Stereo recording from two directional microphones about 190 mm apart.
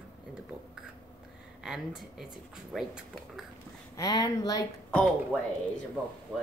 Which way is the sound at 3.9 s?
20° left (ahead or behind).